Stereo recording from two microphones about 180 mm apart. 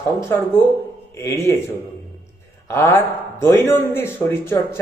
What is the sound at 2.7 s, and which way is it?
A man's voice, 15° left (ahead or behind).